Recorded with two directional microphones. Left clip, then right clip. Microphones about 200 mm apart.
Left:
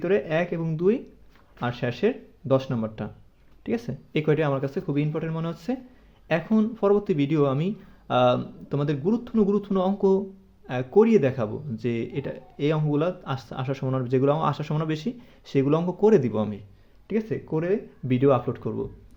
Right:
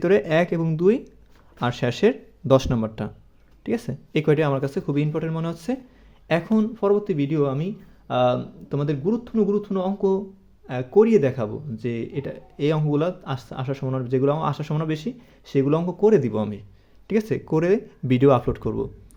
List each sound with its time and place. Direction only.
0.0 s speech: 40° right (ahead or behind)
17.1 s speech: 45° right (ahead or behind)